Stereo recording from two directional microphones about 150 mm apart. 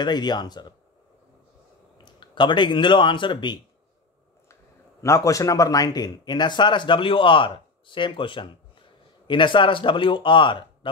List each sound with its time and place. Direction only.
0.0 s speech: 30° left (ahead or behind)
2.0 s speech: 30° left (ahead or behind)
5.0 s speech: 20° left (ahead or behind)